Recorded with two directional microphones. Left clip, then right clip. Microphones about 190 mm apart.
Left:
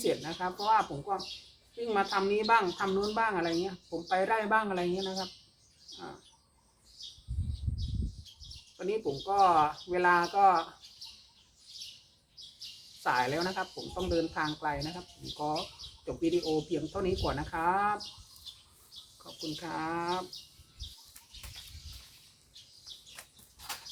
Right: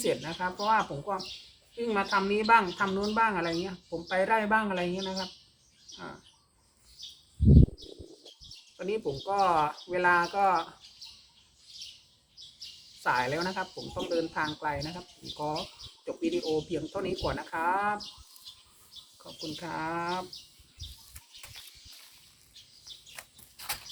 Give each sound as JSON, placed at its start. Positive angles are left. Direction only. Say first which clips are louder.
{"t": 0.0, "sound": "speech", "louder": "right 2 dB", "side_deg": 0}
{"t": 8.8, "sound": "speech", "louder": "right 1 dB", "side_deg": 0}
{"t": 13.0, "sound": "speech", "louder": "right 1 dB", "side_deg": 0}
{"t": 19.5, "sound": "speech", "louder": "right 2 dB", "side_deg": 0}
{"t": 23.2, "sound": "a sound", "louder": "right 4 dB", "side_deg": -40}